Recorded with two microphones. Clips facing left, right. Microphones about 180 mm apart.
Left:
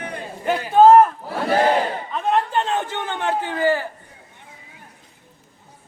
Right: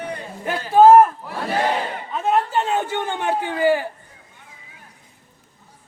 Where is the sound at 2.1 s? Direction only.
5° right (ahead or behind).